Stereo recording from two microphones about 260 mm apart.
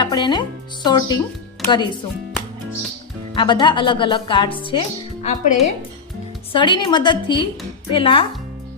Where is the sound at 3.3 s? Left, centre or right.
Centre.